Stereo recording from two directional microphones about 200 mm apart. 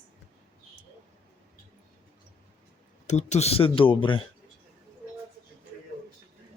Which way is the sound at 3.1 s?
35° left (ahead or behind).